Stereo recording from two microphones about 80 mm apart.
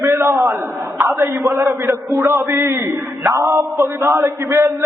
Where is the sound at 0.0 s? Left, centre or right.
Right.